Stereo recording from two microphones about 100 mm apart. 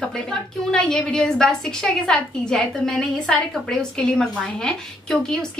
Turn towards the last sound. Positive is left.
turn(degrees=5)  # may be behind; listen again after turning